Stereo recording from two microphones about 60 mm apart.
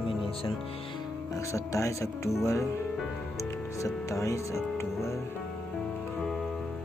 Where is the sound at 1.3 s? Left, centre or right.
Left.